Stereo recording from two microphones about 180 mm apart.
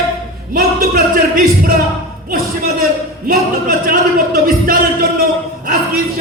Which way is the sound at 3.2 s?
50° right (ahead or behind).